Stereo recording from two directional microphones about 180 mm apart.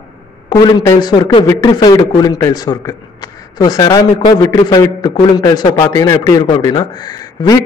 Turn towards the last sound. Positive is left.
turn(degrees=20)  # may be behind; listen again after turning